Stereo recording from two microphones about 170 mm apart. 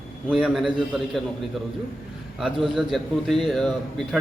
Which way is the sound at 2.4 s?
Centre (ahead or behind).